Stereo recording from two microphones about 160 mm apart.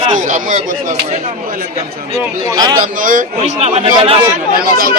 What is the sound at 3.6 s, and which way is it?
Speech, 45° right (ahead or behind).